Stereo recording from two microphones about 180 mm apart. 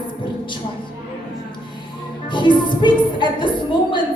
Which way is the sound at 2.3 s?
25° left (ahead or behind).